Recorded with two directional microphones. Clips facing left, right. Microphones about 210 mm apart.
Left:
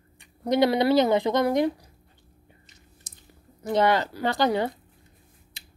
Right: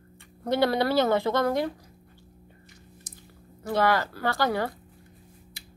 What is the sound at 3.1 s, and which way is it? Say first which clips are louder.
Chewing: right 5 dB; 25° left (ahead or behind).